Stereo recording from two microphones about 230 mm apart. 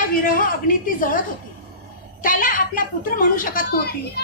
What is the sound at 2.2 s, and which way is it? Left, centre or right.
Speech, left.